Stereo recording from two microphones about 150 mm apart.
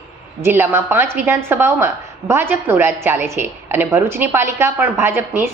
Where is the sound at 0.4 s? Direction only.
15° right (ahead or behind).